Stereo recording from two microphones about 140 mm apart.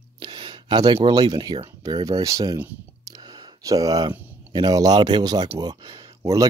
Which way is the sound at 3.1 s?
30° right (ahead or behind).